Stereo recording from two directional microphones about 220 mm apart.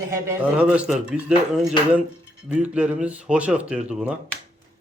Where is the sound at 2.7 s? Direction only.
5° right (ahead or behind).